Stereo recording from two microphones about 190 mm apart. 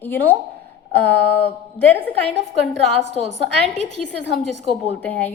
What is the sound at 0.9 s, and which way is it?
A woman's voice, 10° left (ahead or behind).